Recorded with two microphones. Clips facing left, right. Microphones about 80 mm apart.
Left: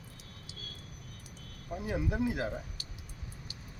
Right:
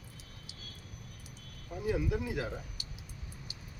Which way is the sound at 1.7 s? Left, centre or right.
Left.